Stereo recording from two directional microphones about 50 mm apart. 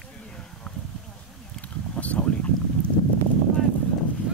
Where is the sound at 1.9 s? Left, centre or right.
Left.